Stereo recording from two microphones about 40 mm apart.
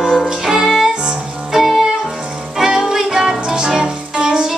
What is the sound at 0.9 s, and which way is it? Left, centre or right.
Music, right.